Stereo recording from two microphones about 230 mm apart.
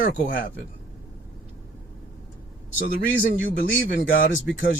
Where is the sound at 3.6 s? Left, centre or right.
Left.